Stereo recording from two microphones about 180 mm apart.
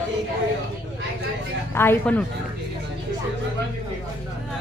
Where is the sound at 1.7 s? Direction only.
10° left (ahead or behind).